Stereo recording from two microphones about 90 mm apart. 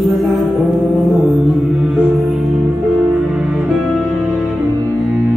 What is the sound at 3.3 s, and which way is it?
Music, 5° right (ahead or behind).